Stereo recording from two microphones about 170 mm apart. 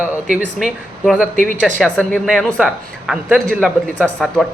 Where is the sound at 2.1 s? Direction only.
Centre (ahead or behind).